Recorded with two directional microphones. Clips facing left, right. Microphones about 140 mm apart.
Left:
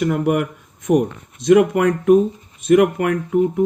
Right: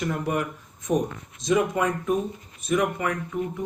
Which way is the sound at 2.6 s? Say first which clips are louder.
Left 10 dB; 65° left (ahead or behind).